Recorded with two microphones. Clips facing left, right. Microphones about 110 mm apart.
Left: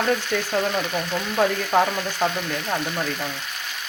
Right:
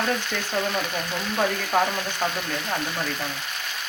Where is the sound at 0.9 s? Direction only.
10° left (ahead or behind).